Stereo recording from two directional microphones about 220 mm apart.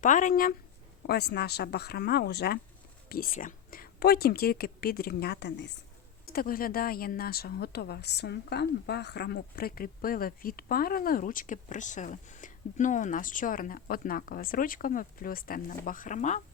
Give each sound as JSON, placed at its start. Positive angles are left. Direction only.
{"t": 0.0, "sound": "speech", "side_deg": 35}